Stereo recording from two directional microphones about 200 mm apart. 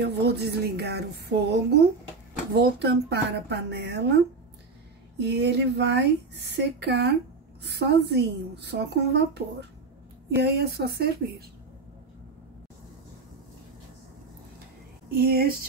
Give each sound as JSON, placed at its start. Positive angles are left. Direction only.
{"t": 0.0, "sound": "speech", "side_deg": -55}
{"t": 5.2, "sound": "speech", "side_deg": -55}
{"t": 15.0, "sound": "speech", "side_deg": -50}